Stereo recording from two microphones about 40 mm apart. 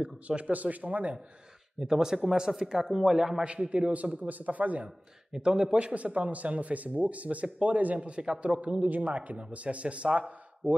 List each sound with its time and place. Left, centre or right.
0.0 s a man's voice: right
0.5 s speech: right
1.8 s speech: centre
3.4 s speech: right
5.3 s speech: centre
5.8 s speech: right